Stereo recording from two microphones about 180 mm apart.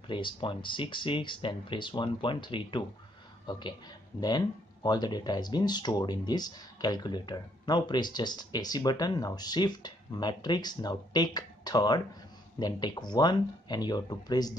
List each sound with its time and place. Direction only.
0.1 s speech: 25° left (ahead or behind)